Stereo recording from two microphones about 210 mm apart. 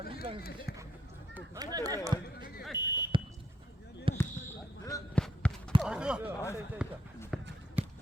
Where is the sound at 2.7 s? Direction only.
20° left (ahead or behind).